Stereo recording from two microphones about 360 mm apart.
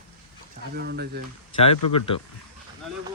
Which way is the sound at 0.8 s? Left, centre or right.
Right.